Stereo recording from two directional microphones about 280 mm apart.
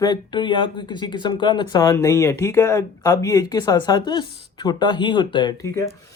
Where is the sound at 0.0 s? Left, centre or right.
Centre.